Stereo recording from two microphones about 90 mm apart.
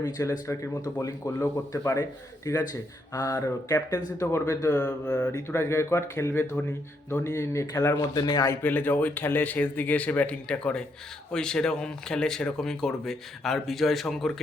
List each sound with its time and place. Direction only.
0.0 s a man's voice: 35° left (ahead or behind)
8.1 s a man's voice: 45° left (ahead or behind)
8.6 s speech: 20° left (ahead or behind); by 14.3 s centre (ahead or behind)